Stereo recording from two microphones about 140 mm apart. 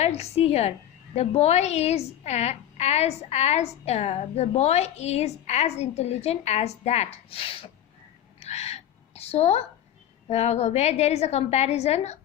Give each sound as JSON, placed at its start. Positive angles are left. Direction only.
{"t": 0.0, "sound": "a woman's voice", "side_deg": 50}
{"t": 8.4, "sound": "a sound", "side_deg": 50}
{"t": 10.2, "sound": "a woman's voice", "side_deg": 50}